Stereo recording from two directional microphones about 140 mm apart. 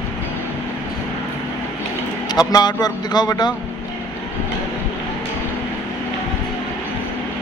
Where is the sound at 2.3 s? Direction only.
30° left (ahead or behind).